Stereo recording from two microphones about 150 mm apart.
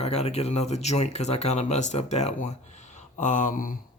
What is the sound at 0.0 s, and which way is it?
Speech, 45° left (ahead or behind).